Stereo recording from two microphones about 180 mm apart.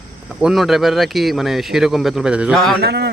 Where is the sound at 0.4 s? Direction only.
Centre (ahead or behind).